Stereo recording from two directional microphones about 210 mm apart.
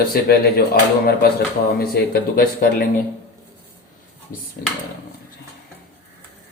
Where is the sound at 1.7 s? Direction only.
45° left (ahead or behind).